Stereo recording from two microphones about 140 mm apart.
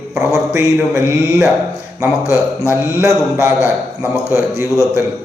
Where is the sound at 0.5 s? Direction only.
20° right (ahead or behind).